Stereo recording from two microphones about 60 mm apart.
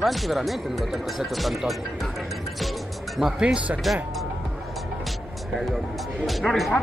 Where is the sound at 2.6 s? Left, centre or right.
Centre.